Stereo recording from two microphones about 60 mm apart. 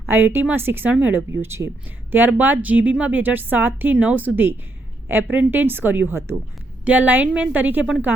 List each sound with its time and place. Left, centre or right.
0.1 s a woman's voice: right
1.3 s speech: right
2.1 s a woman's voice: right
6.1 s speech: right
6.8 s a woman's voice: right